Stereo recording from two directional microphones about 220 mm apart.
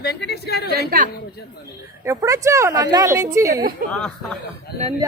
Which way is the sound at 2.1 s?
15° right (ahead or behind).